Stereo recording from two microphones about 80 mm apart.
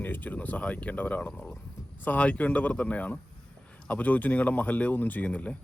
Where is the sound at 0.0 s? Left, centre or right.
Left.